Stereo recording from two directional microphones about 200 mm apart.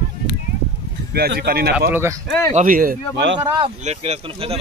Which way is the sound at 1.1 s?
50° right (ahead or behind).